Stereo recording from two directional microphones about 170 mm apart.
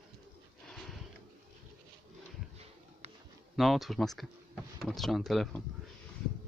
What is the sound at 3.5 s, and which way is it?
Speech, centre (ahead or behind).